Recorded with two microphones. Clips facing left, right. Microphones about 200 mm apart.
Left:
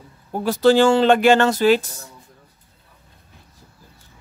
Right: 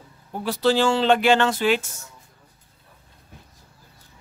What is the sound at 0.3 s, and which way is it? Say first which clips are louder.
Speech: left 6 dB; 45° left (ahead or behind).